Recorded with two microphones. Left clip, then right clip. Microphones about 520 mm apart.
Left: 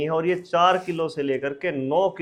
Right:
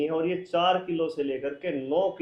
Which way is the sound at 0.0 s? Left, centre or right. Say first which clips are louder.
Left 4 dB; left.